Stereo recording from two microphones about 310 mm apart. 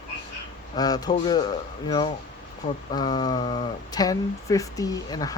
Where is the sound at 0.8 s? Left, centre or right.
Centre.